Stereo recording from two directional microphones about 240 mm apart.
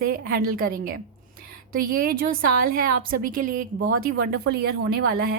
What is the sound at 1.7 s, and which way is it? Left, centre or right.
A woman's voice, right.